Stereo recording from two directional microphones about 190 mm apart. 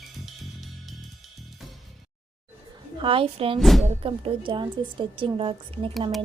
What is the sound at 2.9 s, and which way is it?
Speech, 30° right (ahead or behind).